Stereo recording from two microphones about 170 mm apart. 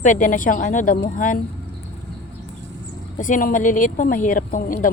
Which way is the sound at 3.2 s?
50° left (ahead or behind).